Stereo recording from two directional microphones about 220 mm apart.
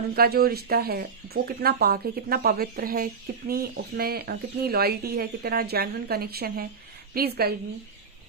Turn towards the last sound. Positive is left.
turn(degrees=-45)  # may be behind; listen again after turning